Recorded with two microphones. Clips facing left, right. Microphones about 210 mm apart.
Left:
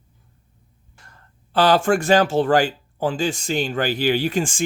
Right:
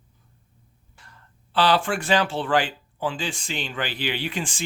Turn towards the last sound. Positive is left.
turn(degrees=45)  # may be behind; listen again after turning